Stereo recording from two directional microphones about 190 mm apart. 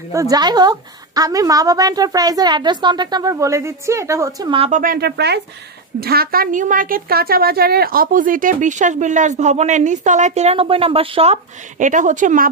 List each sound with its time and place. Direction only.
0.1 s a woman's voice: 15° right (ahead or behind)
4.6 s a woman's voice: 45° right (ahead or behind); by 11.3 s 30° right (ahead or behind)
11.8 s a woman's voice: 40° right (ahead or behind)